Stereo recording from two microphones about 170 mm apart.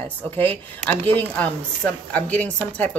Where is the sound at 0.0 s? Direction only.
10° left (ahead or behind).